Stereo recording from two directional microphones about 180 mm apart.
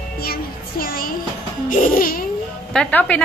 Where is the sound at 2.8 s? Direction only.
5° left (ahead or behind).